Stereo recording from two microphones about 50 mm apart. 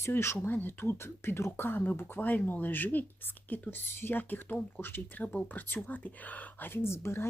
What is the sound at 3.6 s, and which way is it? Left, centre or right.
Speech, left.